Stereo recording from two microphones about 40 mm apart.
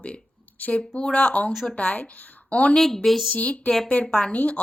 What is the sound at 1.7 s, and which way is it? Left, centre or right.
Speech, left.